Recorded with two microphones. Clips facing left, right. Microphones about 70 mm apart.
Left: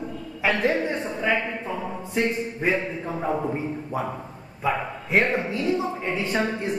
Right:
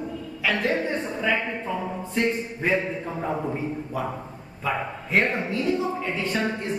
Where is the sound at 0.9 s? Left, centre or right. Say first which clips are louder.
Left 1 dB; centre.